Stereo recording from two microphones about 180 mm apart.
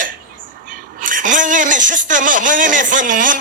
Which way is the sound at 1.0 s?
45° right (ahead or behind).